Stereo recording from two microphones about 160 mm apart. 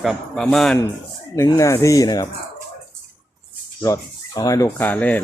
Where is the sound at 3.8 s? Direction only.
20° left (ahead or behind).